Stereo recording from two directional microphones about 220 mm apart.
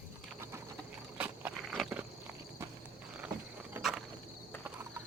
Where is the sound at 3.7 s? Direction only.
Centre (ahead or behind).